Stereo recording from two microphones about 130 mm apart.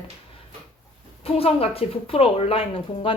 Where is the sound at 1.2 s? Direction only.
50° left (ahead or behind).